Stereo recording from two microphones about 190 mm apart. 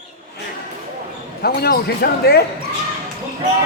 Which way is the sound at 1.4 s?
55° left (ahead or behind).